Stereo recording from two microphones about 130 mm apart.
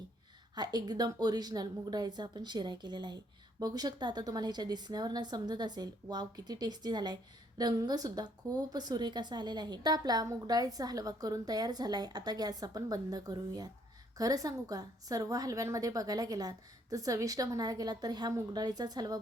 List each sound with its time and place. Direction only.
0.5 s a woman's voice: 30° right (ahead or behind)